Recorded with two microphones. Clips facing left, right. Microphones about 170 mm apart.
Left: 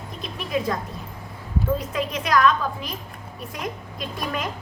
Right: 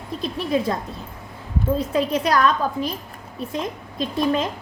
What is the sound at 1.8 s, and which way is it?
A woman's voice, 30° right (ahead or behind).